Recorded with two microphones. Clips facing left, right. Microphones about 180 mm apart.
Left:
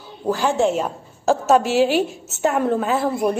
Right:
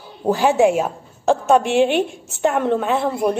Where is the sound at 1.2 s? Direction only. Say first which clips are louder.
Right 1 dB; 5° left (ahead or behind).